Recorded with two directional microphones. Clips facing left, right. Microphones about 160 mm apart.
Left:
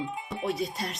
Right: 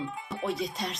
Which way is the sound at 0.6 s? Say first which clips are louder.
Left 1 dB; centre (ahead or behind).